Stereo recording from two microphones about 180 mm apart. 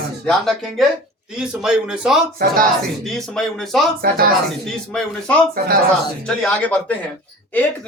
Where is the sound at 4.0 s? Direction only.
55° right (ahead or behind).